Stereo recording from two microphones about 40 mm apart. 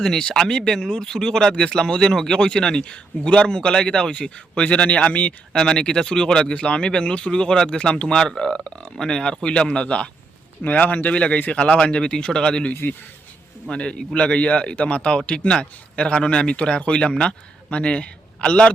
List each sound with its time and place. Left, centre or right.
0.0 s speech: centre; by 5.3 s left
5.5 s speech: centre
10.6 s speech: left
11.1 s speech: left
12.8 s speech: left
13.7 s speech: left